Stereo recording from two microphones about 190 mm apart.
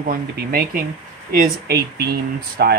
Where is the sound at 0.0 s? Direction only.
50° right (ahead or behind).